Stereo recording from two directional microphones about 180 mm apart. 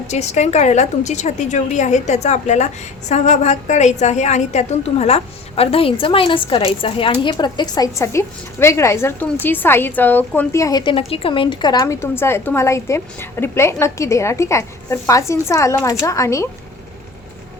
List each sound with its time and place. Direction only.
0.1 s a woman's voice: 40° left (ahead or behind); by 16.5 s 15° left (ahead or behind)